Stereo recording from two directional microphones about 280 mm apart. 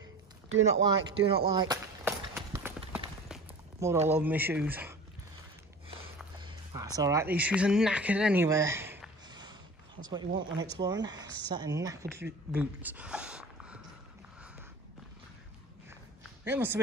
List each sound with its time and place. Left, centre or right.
0.5 s speech: right
1.3 s run: centre
4.1 s speech: centre
6.4 s speech: centre
12.5 s a sound: centre
16.4 s speech: centre